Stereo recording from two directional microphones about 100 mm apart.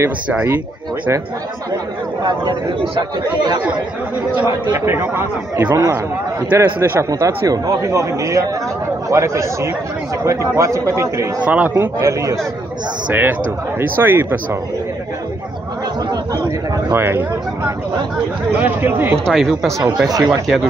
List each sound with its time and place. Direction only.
0.3 s a man's voice: 15° right (ahead or behind)
3.0 s speech: 45° right (ahead or behind)
4.7 s speech: 25° right (ahead or behind)
5.7 s speech: 40° right (ahead or behind)
6.5 s speech: 25° right (ahead or behind)
11.4 s a man's voice: 15° right (ahead or behind)
12.0 s speech: 30° right (ahead or behind)
13.1 s speech: 20° right (ahead or behind)
16.9 s speech: 20° right (ahead or behind)
19.3 s speech: centre (ahead or behind)
20.1 s speech: 40° right (ahead or behind)